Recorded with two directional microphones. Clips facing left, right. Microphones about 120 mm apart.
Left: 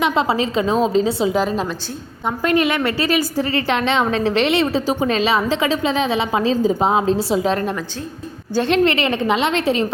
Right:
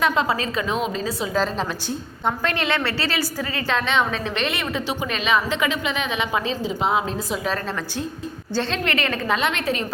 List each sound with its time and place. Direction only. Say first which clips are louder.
0.0 s a woman's voice: left 3 dB; 25° left (ahead or behind)
1.4 s a woman's voice: left 3 dB; 5° left (ahead or behind); by 9.8 s 30° left (ahead or behind)